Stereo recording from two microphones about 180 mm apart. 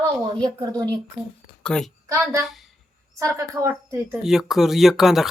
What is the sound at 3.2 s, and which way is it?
Speech, 15° right (ahead or behind).